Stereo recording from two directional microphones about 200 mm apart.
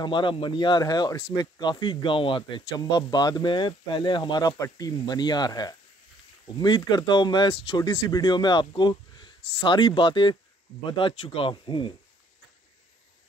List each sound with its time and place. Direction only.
0.0 s speech: 25° left (ahead or behind)